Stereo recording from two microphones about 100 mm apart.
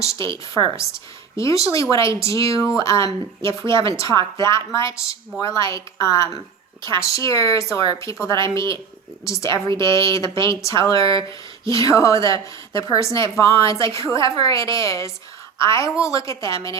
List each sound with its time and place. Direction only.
0.0 s a woman's voice: 30° left (ahead or behind)